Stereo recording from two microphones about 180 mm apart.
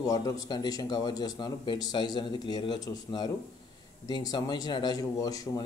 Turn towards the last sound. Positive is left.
turn(degrees=20)  # may be behind; listen again after turning